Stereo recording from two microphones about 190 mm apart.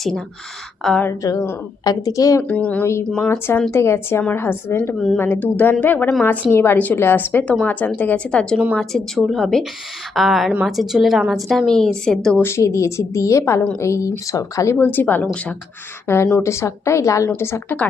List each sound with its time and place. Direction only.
0.8 s speech: 5° left (ahead or behind)
1.2 s a woman's voice: 15° left (ahead or behind)